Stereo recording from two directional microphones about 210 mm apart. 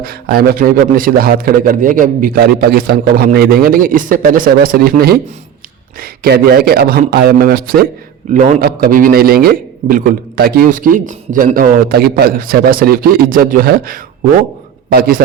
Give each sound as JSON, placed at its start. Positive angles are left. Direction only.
{"t": 0.0, "sound": "a man's voice", "side_deg": -45}